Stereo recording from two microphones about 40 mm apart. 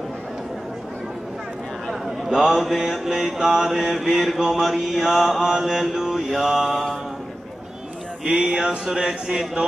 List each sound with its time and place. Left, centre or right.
2.0 s a sound: centre
2.7 s mantra: centre
8.5 s mantra: centre